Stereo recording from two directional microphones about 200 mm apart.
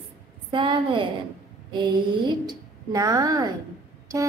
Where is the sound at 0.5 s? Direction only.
25° right (ahead or behind).